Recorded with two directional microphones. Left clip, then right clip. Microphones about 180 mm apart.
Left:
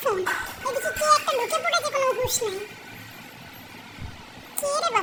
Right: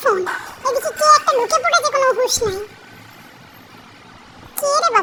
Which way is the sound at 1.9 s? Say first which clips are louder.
Right 8 dB; 30° right (ahead or behind).